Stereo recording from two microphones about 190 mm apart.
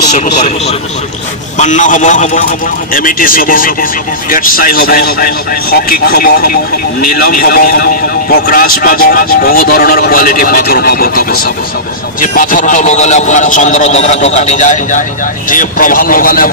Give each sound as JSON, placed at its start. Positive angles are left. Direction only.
{"t": 0.1, "sound": "a man's voice", "side_deg": 40}